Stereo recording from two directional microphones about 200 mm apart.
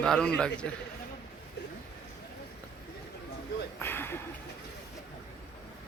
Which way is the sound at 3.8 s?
10° left (ahead or behind).